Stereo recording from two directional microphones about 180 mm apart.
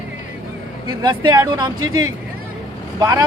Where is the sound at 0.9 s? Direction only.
25° right (ahead or behind).